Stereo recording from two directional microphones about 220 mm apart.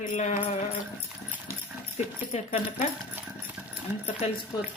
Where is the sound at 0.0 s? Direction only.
35° left (ahead or behind).